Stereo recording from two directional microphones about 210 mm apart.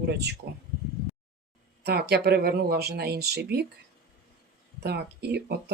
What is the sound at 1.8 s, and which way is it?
Speech, 50° right (ahead or behind).